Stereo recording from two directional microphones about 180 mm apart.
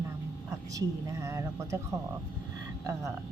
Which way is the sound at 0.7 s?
20° right (ahead or behind).